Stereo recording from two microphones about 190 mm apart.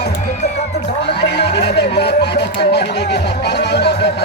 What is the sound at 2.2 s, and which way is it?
Music, 60° left (ahead or behind).